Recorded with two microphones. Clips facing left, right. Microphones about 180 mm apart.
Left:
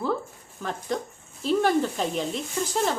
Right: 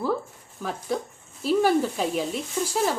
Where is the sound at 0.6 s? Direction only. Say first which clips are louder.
Right 1 dB; 5° right (ahead or behind).